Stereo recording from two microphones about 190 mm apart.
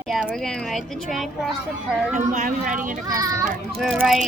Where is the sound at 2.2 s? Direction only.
40° right (ahead or behind).